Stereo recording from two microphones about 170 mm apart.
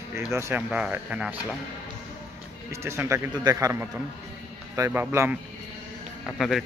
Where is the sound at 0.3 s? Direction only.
15° right (ahead or behind).